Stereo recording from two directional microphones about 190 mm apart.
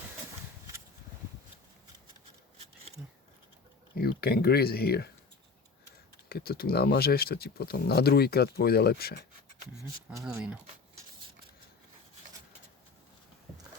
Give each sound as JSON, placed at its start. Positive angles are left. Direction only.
{"t": 3.9, "sound": "speech", "side_deg": 55}
{"t": 6.2, "sound": "speech", "side_deg": 55}
{"t": 10.3, "sound": "speech", "side_deg": -10}